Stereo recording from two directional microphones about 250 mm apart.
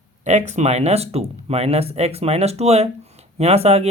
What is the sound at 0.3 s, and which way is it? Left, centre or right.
Speech, right.